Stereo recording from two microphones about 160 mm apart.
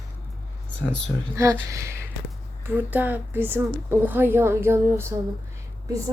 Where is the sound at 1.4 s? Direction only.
20° right (ahead or behind).